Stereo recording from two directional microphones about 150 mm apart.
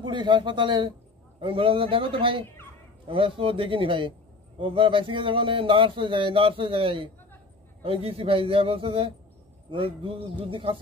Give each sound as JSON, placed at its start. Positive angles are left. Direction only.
{"t": 0.0, "sound": "speech", "side_deg": -30}